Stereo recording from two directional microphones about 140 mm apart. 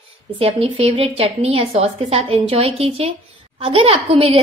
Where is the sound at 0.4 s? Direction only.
45° right (ahead or behind).